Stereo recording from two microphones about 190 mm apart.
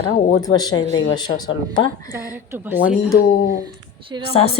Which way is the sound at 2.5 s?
10° right (ahead or behind).